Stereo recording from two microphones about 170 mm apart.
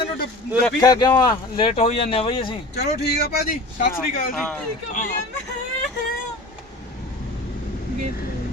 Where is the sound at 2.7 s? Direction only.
70° left (ahead or behind); by 3.9 s 55° left (ahead or behind).